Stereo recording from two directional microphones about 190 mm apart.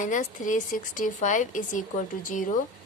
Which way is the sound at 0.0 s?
40° left (ahead or behind).